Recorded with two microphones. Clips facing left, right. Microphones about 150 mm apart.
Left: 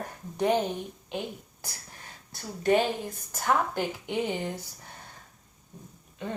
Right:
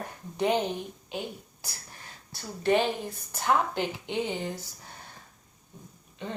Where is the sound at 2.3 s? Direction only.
45° left (ahead or behind).